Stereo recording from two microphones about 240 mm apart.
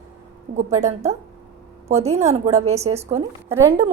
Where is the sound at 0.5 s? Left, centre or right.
Right.